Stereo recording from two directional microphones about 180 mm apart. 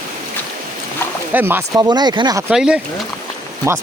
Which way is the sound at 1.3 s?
10° right (ahead or behind).